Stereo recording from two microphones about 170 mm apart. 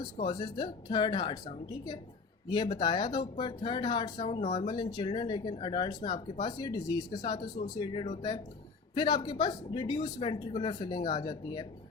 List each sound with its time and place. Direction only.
0.0 s speech: 30° left (ahead or behind)
4.7 s speech: 25° left (ahead or behind)